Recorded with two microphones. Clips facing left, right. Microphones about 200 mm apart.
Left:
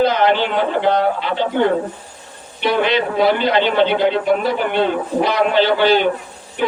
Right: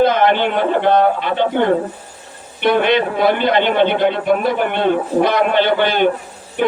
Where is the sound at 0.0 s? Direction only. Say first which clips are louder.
Right 2 dB; 55° right (ahead or behind).